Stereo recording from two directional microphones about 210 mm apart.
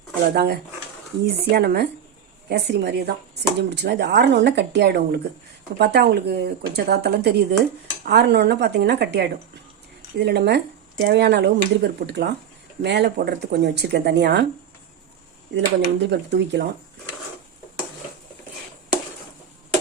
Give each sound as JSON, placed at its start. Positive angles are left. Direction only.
{"t": 0.3, "sound": "speech", "side_deg": -50}
{"t": 15.5, "sound": "speech", "side_deg": -55}